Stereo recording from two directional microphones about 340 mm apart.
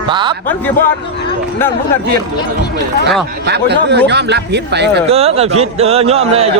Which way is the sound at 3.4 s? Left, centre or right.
Right.